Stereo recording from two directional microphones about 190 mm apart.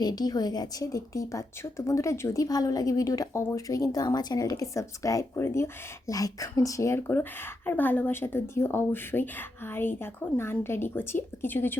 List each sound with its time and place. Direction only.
0.0 s a woman's voice: 20° left (ahead or behind)